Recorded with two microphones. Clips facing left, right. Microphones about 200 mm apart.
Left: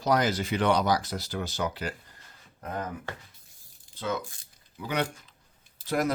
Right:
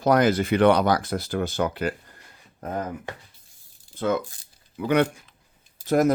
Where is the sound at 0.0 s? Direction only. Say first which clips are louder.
Right 6 dB; 55° right (ahead or behind).